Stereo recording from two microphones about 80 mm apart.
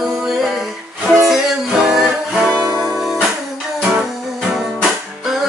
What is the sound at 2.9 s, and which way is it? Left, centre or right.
Music, centre.